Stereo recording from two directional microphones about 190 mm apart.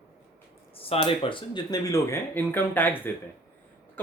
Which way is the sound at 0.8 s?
30° left (ahead or behind).